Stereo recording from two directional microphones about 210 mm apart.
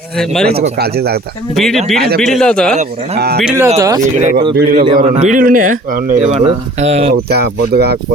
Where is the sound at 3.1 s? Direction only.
50° right (ahead or behind).